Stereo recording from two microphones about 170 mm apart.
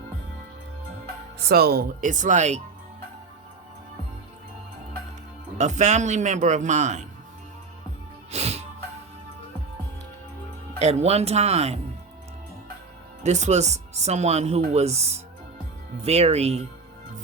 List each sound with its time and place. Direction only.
1.5 s speech: 65° right (ahead or behind); by 2.6 s 45° right (ahead or behind)
5.5 s speech: 45° right (ahead or behind)
8.3 s music: 40° right (ahead or behind)
10.8 s speech: 40° right (ahead or behind)
13.2 s speech: 45° right (ahead or behind)